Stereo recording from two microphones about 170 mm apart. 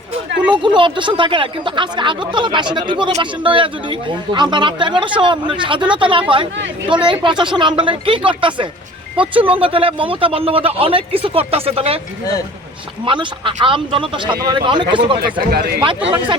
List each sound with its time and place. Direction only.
0.5 s speech: 30° right (ahead or behind)
13.1 s speech: 30° right (ahead or behind)
15.2 s speech: 65° right (ahead or behind)